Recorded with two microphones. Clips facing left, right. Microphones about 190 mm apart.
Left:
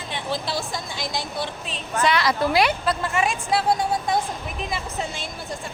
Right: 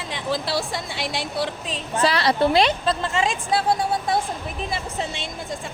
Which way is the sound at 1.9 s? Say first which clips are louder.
Right 1 dB; 30° right (ahead or behind).